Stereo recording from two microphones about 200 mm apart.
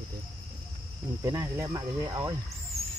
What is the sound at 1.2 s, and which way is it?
Speech, 15° right (ahead or behind).